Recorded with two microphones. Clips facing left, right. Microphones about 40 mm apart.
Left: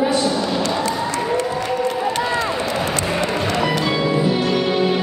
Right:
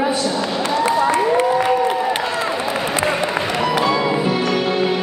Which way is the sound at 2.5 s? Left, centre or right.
Centre.